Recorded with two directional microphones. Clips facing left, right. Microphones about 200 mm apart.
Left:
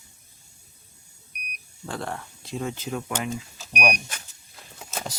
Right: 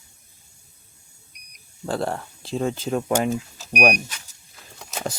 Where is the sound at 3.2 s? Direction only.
45° right (ahead or behind).